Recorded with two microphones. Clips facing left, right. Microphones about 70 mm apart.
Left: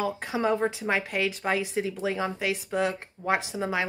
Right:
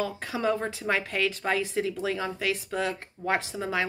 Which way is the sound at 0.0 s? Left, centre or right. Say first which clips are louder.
Left 1 dB; left.